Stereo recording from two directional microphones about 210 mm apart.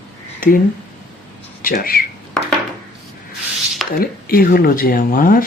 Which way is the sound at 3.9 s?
45° left (ahead or behind).